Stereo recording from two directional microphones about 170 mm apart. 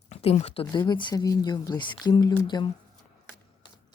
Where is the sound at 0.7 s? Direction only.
25° left (ahead or behind).